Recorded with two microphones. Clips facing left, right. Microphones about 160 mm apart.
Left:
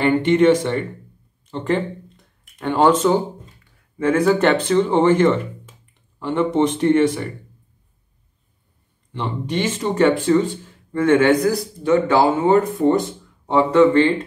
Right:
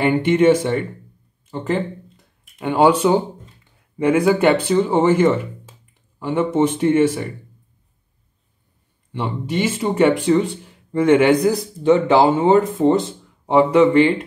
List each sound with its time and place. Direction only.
0.0 s speech: 5° right (ahead or behind)
9.1 s speech: 5° right (ahead or behind)